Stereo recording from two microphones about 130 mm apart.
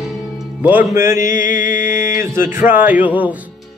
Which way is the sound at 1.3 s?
90° left.